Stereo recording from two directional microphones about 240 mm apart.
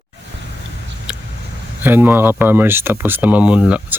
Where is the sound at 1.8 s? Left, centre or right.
Centre.